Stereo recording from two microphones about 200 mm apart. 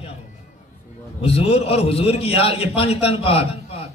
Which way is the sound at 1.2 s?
30° left (ahead or behind).